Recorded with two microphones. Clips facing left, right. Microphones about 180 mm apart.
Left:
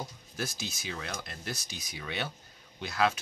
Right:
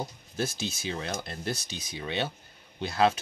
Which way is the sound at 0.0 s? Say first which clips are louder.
Right 5 dB; 25° right (ahead or behind).